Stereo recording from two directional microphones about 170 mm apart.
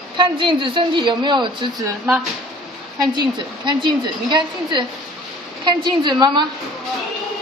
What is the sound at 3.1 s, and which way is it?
Speech, 25° right (ahead or behind).